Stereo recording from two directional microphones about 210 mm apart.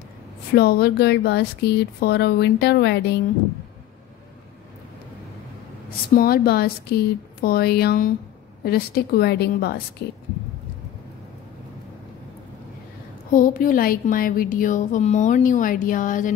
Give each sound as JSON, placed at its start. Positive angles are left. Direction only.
{"t": 0.6, "sound": "speech", "side_deg": 50}
{"t": 6.1, "sound": "speech", "side_deg": 45}
{"t": 13.3, "sound": "a woman's voice", "side_deg": 40}